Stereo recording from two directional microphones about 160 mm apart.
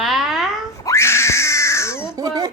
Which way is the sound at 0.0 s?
Centre (ahead or behind).